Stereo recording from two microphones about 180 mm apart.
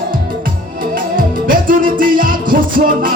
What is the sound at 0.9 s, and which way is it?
Music, 50° right (ahead or behind).